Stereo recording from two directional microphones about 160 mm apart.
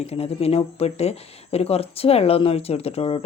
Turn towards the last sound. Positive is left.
turn(degrees=40)  # may be behind; listen again after turning